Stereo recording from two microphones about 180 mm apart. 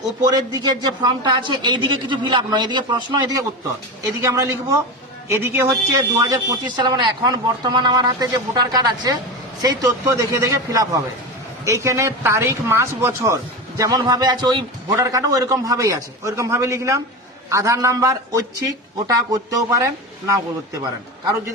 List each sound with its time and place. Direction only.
0.3 s a man's voice: 20° right (ahead or behind)